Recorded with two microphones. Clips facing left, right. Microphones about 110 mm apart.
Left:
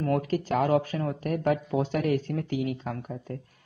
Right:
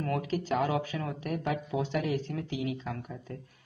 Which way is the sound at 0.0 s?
45° left (ahead or behind).